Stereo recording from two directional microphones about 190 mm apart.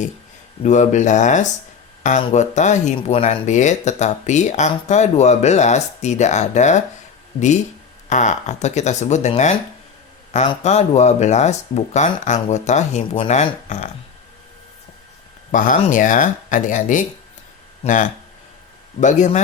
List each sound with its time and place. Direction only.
0.6 s speech: 40° left (ahead or behind)
8.1 s speech: 40° left (ahead or behind)
15.5 s speech: 45° left (ahead or behind)